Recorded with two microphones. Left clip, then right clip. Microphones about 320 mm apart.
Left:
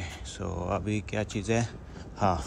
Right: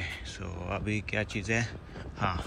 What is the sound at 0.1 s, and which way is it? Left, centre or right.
Speech, centre.